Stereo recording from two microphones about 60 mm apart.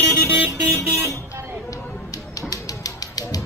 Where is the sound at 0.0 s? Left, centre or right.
Right.